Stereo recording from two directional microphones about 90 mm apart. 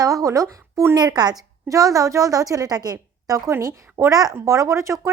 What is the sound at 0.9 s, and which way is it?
A woman's voice, 50° right (ahead or behind).